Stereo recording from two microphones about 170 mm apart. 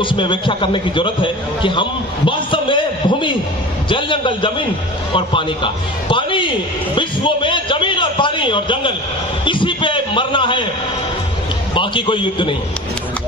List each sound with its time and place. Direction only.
0.0 s a man's voice: 30° left (ahead or behind)
7.0 s a sound: 30° left (ahead or behind)
9.4 s a man's voice: 30° left (ahead or behind)
11.7 s a man's voice: 30° left (ahead or behind)